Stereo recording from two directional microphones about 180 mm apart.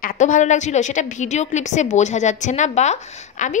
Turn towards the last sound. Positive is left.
turn(degrees=40)  # may be behind; listen again after turning